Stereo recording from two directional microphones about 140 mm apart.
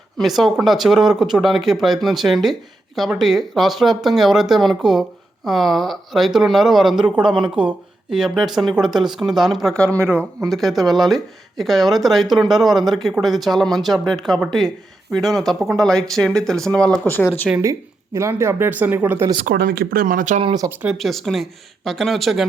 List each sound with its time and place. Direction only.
0.2 s speech: centre (ahead or behind)
17.6 s speech: 20° right (ahead or behind)
19.5 s speech: 90° right; by 20.4 s 70° right (ahead or behind)
20.4 s speech: 30° right (ahead or behind)
21.0 s speech: centre (ahead or behind)